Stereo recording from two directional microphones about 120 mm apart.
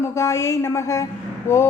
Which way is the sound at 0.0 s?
25° left (ahead or behind).